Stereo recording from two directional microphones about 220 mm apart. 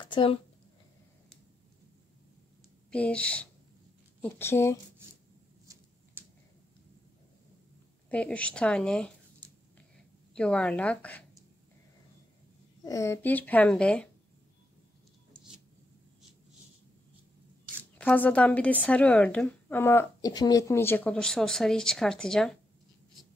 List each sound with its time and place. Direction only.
0.0 s speech: 25° left (ahead or behind)
2.9 s a woman's voice: 5° left (ahead or behind)
6.2 s a sound: 10° right (ahead or behind)
8.1 s a woman's voice: 5° left (ahead or behind)
12.8 s a woman's voice: 15° left (ahead or behind)
17.9 s a woman's voice: 5° left (ahead or behind)